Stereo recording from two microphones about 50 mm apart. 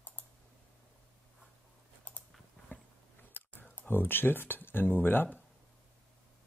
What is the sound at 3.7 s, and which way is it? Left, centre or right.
Speech, left.